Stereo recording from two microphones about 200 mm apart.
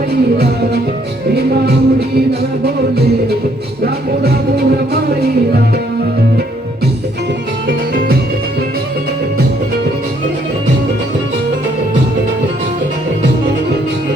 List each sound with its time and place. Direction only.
1.4 s music: 55° right (ahead or behind)